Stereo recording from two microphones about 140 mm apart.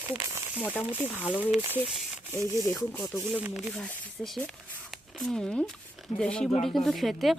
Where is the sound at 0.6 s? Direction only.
10° left (ahead or behind).